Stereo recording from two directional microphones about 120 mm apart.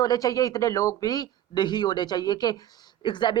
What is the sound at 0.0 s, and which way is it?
Speech, 30° left (ahead or behind).